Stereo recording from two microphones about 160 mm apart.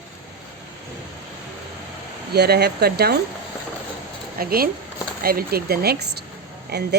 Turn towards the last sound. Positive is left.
turn(degrees=-90)